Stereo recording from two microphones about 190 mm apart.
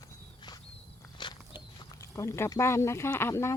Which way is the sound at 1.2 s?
25° left (ahead or behind).